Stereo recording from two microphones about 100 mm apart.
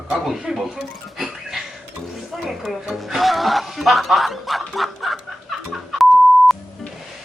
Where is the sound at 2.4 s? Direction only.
5° right (ahead or behind).